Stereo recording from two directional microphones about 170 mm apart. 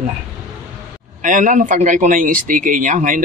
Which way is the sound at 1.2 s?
50° right (ahead or behind).